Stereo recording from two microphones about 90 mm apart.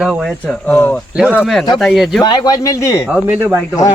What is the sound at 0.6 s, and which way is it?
Speech, 15° left (ahead or behind).